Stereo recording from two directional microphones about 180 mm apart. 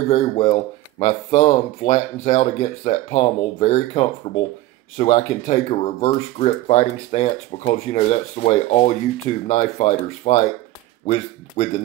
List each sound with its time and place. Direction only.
0.1 s speech: 35° left (ahead or behind)
11.6 s speech: 35° left (ahead or behind)